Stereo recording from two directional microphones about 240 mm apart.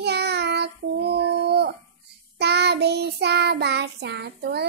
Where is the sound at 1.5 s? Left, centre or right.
Right.